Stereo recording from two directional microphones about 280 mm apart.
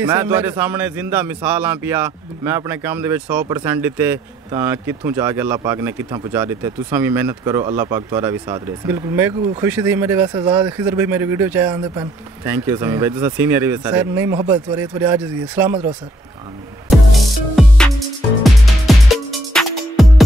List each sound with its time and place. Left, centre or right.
0.0 s speech: centre
17.6 s music: centre